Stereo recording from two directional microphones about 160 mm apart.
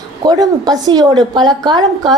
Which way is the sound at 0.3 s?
25° right (ahead or behind).